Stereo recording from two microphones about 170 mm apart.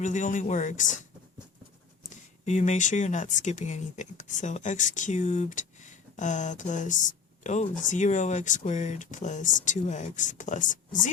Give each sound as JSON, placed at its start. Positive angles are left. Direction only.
{"t": 0.0, "sound": "speech", "side_deg": 45}
{"t": 2.0, "sound": "speech", "side_deg": 45}